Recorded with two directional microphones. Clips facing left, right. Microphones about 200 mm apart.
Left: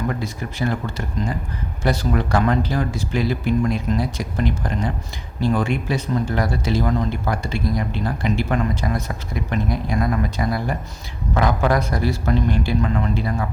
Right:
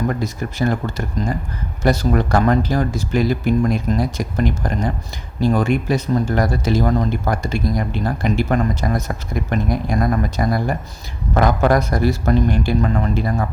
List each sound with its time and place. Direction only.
0.1 s speech: 45° right (ahead or behind)